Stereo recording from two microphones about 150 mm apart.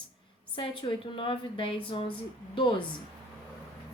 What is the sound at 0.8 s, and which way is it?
A woman's voice, 35° left (ahead or behind).